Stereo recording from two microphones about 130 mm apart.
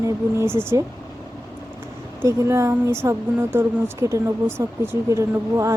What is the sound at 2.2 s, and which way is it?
Speech, 20° right (ahead or behind).